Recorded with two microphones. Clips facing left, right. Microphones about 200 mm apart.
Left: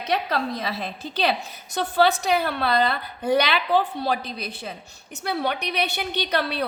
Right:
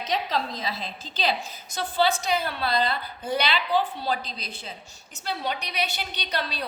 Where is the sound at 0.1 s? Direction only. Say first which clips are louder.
Left 4 dB; 60° left (ahead or behind).